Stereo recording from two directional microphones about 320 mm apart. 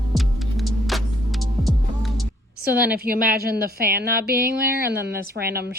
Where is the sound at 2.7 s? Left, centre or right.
Centre.